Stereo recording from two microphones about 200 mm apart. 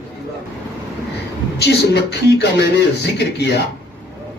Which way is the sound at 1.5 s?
55° left (ahead or behind).